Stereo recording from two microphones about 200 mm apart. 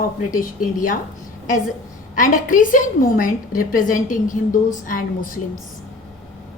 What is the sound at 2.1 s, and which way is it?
A woman's voice, 40° left (ahead or behind).